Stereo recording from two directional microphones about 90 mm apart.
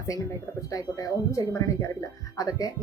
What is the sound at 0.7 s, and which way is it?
Speech, 40° left (ahead or behind).